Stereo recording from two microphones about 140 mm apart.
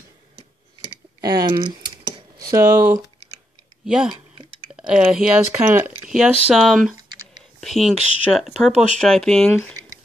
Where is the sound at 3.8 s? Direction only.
5° right (ahead or behind).